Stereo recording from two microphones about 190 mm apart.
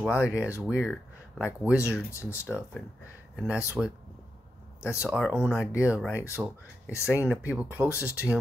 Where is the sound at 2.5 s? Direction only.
Centre (ahead or behind).